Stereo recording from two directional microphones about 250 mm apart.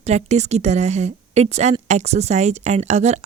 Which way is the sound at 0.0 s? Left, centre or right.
Right.